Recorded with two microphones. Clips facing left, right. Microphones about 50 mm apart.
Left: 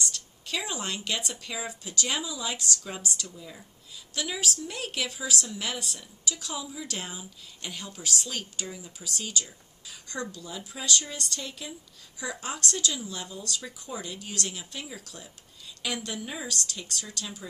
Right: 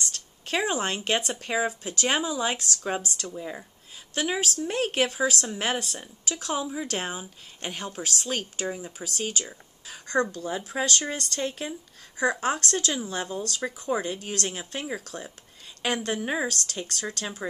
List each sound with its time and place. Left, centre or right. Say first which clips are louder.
0.0 s a woman's voice: even; right